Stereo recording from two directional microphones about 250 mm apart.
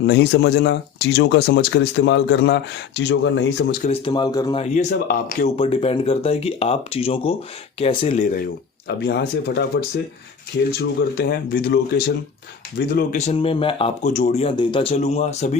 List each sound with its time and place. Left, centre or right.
0.0 s speech: left
3.8 s speech: left
4.6 s speech: left
8.9 s speech: left
10.7 s speech: left